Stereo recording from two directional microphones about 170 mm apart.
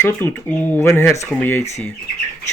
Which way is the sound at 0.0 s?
10° left (ahead or behind).